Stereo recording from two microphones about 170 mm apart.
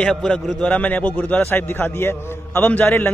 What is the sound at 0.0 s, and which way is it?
A man's voice, 5° left (ahead or behind).